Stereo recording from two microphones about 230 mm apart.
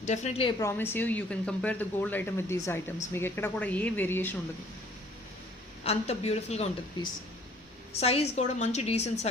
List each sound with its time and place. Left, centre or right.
0.0 s a woman's voice: left
0.6 s speech: centre
5.8 s a woman's voice: left